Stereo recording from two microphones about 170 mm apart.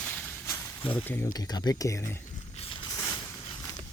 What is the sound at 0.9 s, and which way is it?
Speech, 10° left (ahead or behind).